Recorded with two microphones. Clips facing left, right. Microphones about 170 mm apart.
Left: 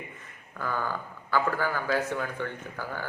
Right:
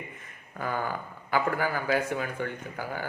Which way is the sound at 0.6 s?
15° right (ahead or behind).